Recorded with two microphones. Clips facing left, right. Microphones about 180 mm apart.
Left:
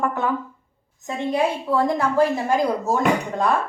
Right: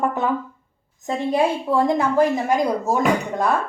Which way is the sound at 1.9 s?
20° right (ahead or behind).